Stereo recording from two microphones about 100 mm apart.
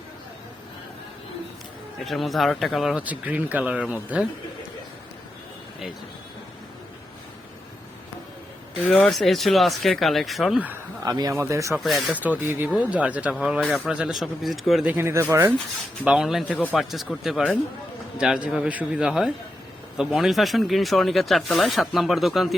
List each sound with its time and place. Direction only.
2.0 s speech: centre (ahead or behind)
3.0 s speech: 15° right (ahead or behind)
8.8 s speech: 15° left (ahead or behind)
9.1 s speech: centre (ahead or behind)
11.0 s speech: 40° right (ahead or behind)
11.7 s speech: centre (ahead or behind)
12.1 s speech: 15° right (ahead or behind)
13.3 s speech: centre (ahead or behind)
14.8 s speech: 25° right (ahead or behind)
16.0 s speech: 5° right (ahead or behind)